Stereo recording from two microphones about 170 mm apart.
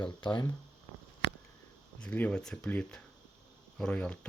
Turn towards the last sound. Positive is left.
turn(degrees=5)  # may be behind; listen again after turning